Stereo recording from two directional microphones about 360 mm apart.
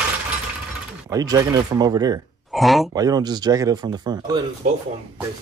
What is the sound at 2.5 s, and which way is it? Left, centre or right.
Speech, centre.